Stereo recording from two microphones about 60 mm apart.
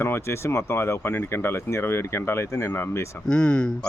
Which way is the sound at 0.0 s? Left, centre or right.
Left.